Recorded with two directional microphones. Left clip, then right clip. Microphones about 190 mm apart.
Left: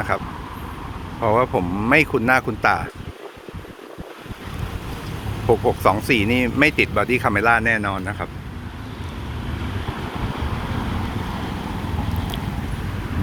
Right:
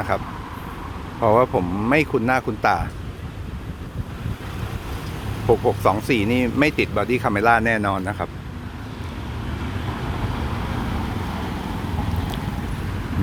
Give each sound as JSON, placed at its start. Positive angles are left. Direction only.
{"t": 1.2, "sound": "speech", "side_deg": -15}
{"t": 1.8, "sound": "speech", "side_deg": -5}
{"t": 5.5, "sound": "speech", "side_deg": -5}
{"t": 7.4, "sound": "speech", "side_deg": -20}